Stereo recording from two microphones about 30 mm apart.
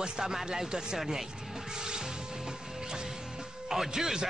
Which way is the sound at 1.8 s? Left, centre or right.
Right.